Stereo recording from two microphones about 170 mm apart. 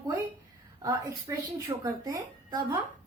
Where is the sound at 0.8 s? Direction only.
20° right (ahead or behind).